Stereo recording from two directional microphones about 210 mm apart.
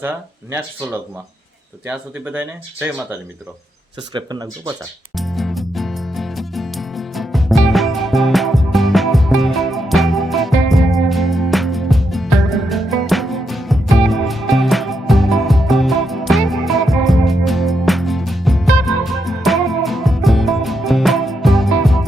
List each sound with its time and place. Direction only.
1.9 s speech: 5° right (ahead or behind)
4.1 s speech: 20° right (ahead or behind)
5.1 s music: centre (ahead or behind)